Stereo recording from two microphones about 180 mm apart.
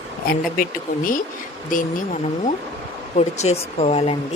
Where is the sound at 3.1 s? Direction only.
40° left (ahead or behind).